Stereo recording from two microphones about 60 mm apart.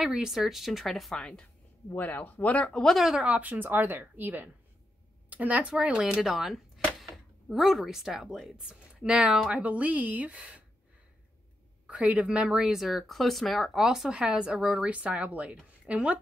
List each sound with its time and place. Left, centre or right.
0.0 s speech: centre
1.1 s a woman's voice: centre
2.0 s speech: left
3.2 s speech: right
11.9 s speech: centre
14.1 s speech: centre